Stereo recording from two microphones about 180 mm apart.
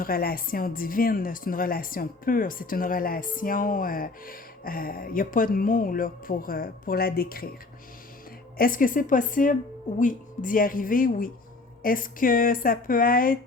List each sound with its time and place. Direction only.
0.0 s speech: 55° left (ahead or behind)
8.5 s speech: 50° left (ahead or behind)